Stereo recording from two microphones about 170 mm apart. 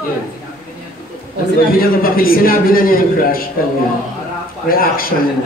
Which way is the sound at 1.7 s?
60° left (ahead or behind).